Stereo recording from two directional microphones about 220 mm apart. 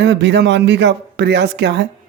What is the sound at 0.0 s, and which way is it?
Speech, 55° right (ahead or behind).